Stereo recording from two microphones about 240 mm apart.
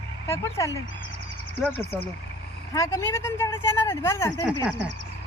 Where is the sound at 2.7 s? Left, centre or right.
Centre.